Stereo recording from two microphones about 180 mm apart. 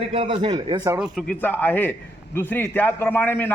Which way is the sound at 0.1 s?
30° right (ahead or behind).